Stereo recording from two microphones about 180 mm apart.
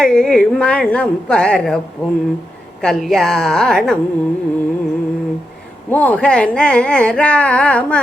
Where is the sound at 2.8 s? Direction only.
Centre (ahead or behind).